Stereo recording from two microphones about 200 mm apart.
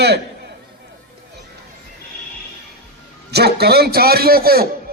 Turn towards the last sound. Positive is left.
turn(degrees=-50)  # may be behind; listen again after turning